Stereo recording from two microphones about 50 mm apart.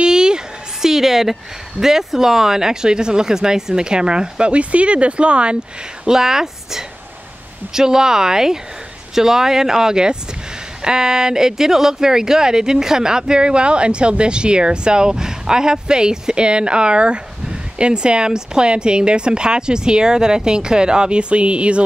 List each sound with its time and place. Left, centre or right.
0.0 s a sound: centre
0.8 s speech: centre; by 5.6 s right
6.0 s speech: centre